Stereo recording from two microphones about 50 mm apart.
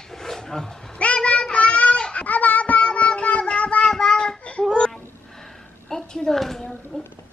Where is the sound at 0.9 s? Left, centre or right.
Left.